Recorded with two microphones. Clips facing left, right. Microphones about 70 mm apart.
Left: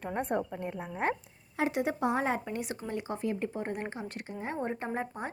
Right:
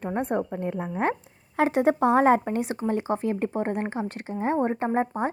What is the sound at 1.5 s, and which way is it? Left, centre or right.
A woman's voice, right.